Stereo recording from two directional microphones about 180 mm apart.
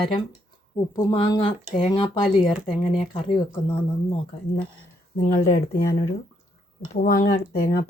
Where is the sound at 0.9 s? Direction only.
25° left (ahead or behind).